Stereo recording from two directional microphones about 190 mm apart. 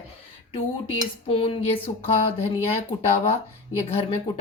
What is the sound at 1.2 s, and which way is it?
Speech, 30° left (ahead or behind).